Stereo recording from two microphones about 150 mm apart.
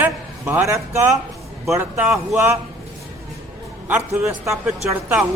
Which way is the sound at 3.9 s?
15° right (ahead or behind).